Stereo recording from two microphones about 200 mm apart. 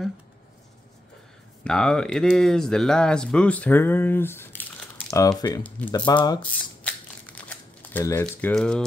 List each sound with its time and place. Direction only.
1.6 s speech: 5° left (ahead or behind)
5.9 s speech: 20° left (ahead or behind)
6.8 s crumpling: 5° left (ahead or behind)